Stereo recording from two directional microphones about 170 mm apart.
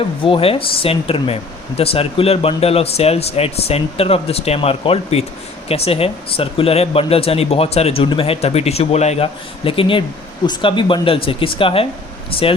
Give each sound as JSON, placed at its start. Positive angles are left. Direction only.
{"t": 0.3, "sound": "speech", "side_deg": 35}